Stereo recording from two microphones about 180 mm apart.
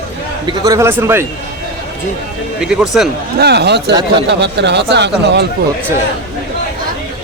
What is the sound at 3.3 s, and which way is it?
Speech, 65° right (ahead or behind).